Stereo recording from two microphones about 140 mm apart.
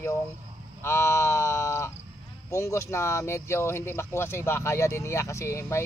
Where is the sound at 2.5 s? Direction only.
20° left (ahead or behind).